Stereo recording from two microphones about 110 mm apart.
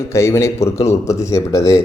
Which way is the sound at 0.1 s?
25° left (ahead or behind).